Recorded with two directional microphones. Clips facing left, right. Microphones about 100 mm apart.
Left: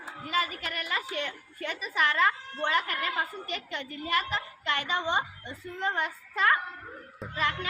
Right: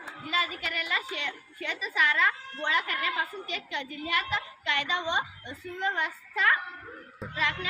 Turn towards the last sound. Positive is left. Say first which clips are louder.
# left 1 dB
turn(degrees=40)  # may be behind; listen again after turning